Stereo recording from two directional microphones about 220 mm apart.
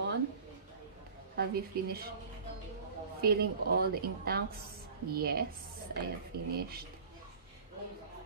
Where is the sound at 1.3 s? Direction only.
45° right (ahead or behind).